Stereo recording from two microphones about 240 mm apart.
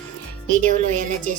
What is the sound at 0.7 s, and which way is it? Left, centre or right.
Speech, right.